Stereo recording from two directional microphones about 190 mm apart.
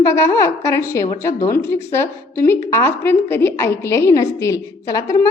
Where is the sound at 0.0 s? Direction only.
15° left (ahead or behind).